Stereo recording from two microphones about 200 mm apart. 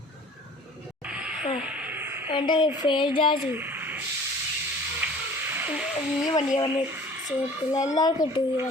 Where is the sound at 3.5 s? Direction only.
10° right (ahead or behind).